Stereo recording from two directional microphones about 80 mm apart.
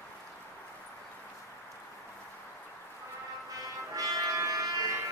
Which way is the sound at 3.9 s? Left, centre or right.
Right.